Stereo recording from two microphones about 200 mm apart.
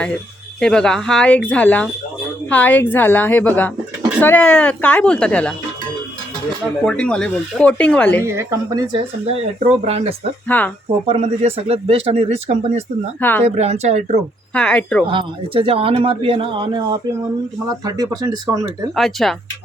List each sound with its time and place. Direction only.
0.6 s a woman's voice: 5° left (ahead or behind)
6.8 s speech: 5° left (ahead or behind)
8.2 s speech: 15° right (ahead or behind)
9.3 s speech: 30° right (ahead or behind)
10.5 s a woman's voice: 10° left (ahead or behind)
11.0 s speech: 30° right (ahead or behind)
13.1 s a woman's voice: 10° left (ahead or behind)
13.6 s speech: 35° right (ahead or behind)
14.5 s speech: 5° left (ahead or behind)
15.0 s speech: 25° right (ahead or behind)
18.9 s speech: centre (ahead or behind)